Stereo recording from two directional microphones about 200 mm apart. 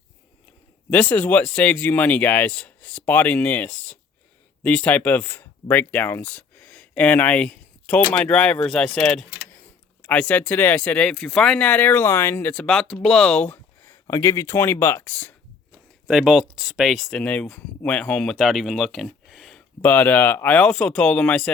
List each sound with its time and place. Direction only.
0.9 s speech: 5° left (ahead or behind)
16.0 s speech: 5° right (ahead or behind)